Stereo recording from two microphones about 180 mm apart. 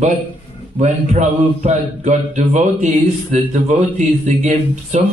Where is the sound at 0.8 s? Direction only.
45° right (ahead or behind).